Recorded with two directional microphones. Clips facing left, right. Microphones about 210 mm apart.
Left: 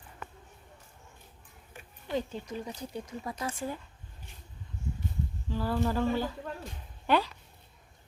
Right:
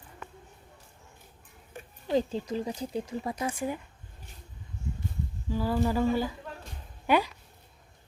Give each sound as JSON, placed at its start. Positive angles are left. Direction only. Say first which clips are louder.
{"t": 1.7, "sound": "speech", "louder": "right 6 dB", "side_deg": -35}
{"t": 3.3, "sound": "speech", "louder": "right 2 dB", "side_deg": -15}
{"t": 5.5, "sound": "speech", "louder": "right 3 dB", "side_deg": -10}